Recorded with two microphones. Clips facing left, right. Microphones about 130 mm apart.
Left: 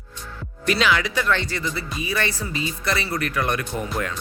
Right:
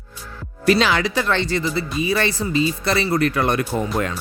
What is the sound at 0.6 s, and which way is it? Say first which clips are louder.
Speech: right 4 dB; 35° right (ahead or behind).